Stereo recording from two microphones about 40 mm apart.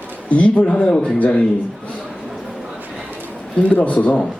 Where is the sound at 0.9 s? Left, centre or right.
Left.